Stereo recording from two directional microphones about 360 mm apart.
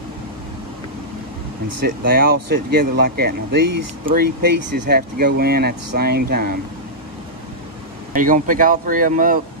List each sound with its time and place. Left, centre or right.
2.0 s speech: right
8.1 s speech: right